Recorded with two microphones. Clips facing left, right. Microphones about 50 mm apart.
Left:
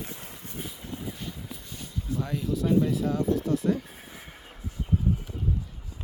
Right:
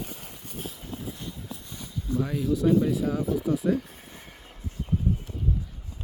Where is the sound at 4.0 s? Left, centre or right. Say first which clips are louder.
Left 1 dB; centre.